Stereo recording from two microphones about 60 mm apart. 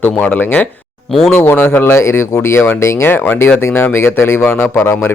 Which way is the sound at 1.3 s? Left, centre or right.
Left.